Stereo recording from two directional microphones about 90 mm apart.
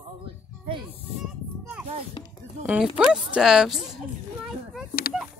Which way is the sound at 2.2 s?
60° left (ahead or behind).